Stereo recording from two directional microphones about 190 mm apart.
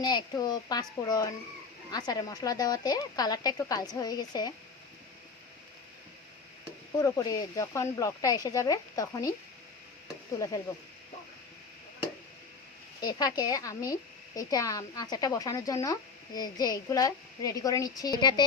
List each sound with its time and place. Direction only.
0.0 s a woman's voice: 20° left (ahead or behind)
6.9 s a woman's voice: 20° left (ahead or behind)
10.3 s a sound: 20° left (ahead or behind)
13.0 s a woman's voice: 20° left (ahead or behind)